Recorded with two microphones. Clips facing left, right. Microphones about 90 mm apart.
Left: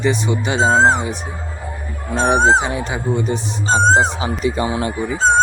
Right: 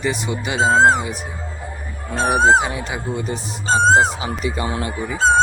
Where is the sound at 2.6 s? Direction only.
25° left (ahead or behind).